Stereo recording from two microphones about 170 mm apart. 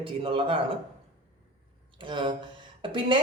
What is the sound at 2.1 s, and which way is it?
Speech, 30° right (ahead or behind).